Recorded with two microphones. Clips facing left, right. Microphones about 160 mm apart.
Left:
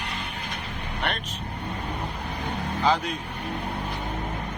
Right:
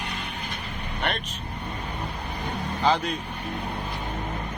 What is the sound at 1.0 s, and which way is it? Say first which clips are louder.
Speech: right 1 dB; centre (ahead or behind).